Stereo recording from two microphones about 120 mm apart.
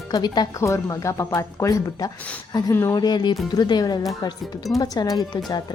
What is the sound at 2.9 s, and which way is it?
A woman's voice, 35° left (ahead or behind).